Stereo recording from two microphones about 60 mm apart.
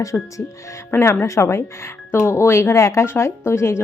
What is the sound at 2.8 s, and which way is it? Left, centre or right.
Speech, left.